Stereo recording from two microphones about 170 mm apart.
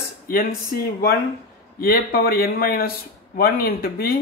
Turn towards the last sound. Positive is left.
turn(degrees=65)  # may be behind; listen again after turning